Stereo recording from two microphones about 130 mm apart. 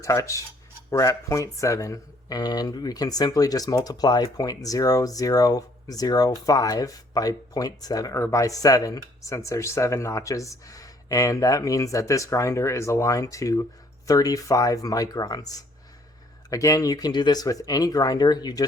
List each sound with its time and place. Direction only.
0.0 s speech: 25° left (ahead or behind)